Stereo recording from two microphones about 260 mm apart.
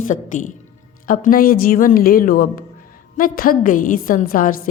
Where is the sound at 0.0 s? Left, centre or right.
Left.